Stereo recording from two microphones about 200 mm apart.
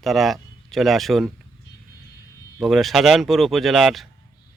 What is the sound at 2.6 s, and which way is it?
Speech, centre (ahead or behind).